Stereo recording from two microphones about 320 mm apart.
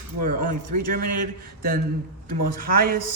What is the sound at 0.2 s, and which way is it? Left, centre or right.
A man's voice, right.